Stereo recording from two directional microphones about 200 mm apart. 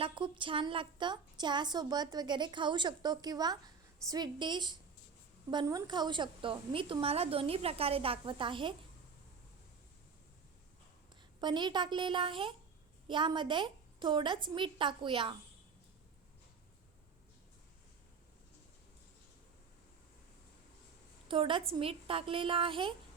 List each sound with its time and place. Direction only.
0.0 s a woman's voice: 25° right (ahead or behind)
11.3 s a woman's voice: 20° right (ahead or behind)
21.2 s a woman's voice: 25° right (ahead or behind)